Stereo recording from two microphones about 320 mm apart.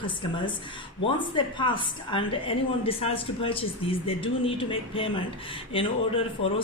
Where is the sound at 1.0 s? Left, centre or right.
Centre.